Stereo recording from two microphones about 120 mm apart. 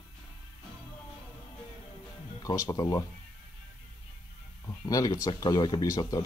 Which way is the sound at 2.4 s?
30° left (ahead or behind).